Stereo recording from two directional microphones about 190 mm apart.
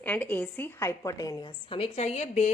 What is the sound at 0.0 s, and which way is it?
A woman's voice, 10° left (ahead or behind).